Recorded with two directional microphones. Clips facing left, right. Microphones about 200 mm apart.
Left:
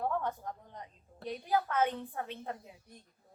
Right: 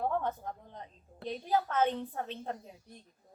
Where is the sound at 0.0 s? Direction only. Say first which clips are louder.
Right 2 dB; 20° right (ahead or behind).